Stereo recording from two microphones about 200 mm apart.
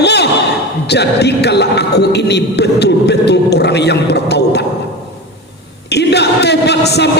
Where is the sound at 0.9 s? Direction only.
55° left (ahead or behind).